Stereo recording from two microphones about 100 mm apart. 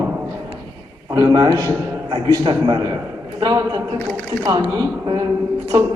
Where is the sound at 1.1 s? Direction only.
40° right (ahead or behind).